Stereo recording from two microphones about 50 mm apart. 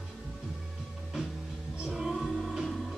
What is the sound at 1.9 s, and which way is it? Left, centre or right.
Music, centre.